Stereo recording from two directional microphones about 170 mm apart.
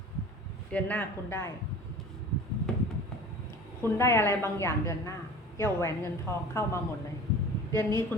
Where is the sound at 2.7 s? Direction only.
5° left (ahead or behind).